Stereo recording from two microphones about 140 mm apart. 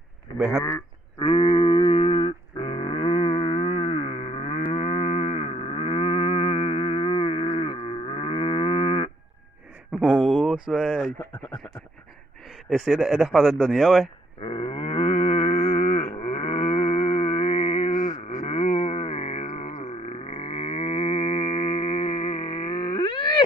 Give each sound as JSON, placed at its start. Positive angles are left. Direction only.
{"t": 1.2, "sound": "a sound", "side_deg": 45}
{"t": 10.3, "sound": "speech", "side_deg": -5}
{"t": 12.6, "sound": "speech", "side_deg": 0}
{"t": 14.4, "sound": "livestock", "side_deg": 40}
{"t": 17.9, "sound": "music", "side_deg": 60}
{"t": 19.4, "sound": "grunt", "side_deg": 60}